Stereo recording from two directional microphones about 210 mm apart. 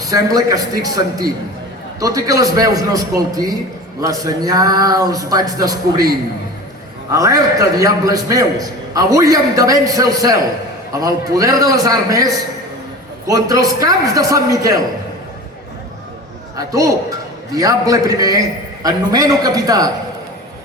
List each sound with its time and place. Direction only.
0.1 s a man's voice: 15° right (ahead or behind)
16.6 s a man's voice: 15° right (ahead or behind)